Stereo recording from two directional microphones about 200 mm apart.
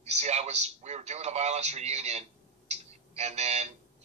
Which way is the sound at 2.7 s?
35° right (ahead or behind).